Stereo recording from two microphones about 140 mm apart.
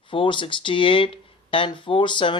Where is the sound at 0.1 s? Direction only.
35° left (ahead or behind).